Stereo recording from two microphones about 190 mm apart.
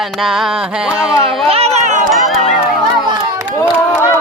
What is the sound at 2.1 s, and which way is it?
Music, centre (ahead or behind).